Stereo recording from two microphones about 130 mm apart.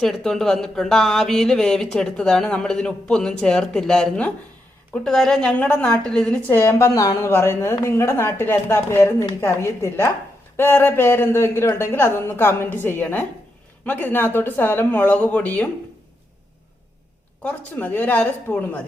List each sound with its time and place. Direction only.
0.0 s a woman's voice: centre (ahead or behind)
17.4 s a woman's voice: 10° left (ahead or behind)